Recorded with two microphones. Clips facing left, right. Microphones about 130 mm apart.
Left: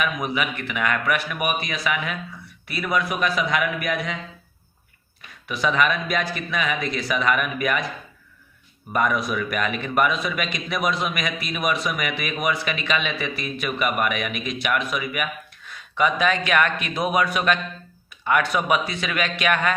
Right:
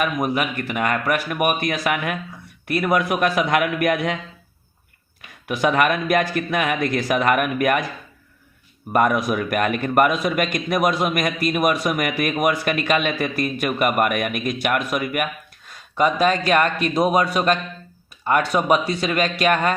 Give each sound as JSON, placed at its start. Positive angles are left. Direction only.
{"t": 0.0, "sound": "a man's voice", "side_deg": -45}
{"t": 1.5, "sound": "a man's voice", "side_deg": -55}
{"t": 5.5, "sound": "a man's voice", "side_deg": -55}
{"t": 8.9, "sound": "a man's voice", "side_deg": -50}
{"t": 15.7, "sound": "a man's voice", "side_deg": -35}